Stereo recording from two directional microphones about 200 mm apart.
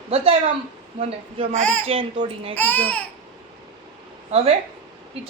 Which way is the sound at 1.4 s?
40° right (ahead or behind).